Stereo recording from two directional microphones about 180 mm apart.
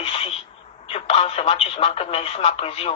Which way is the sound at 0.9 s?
35° left (ahead or behind).